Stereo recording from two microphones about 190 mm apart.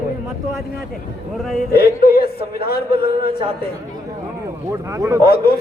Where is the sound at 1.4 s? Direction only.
Centre (ahead or behind).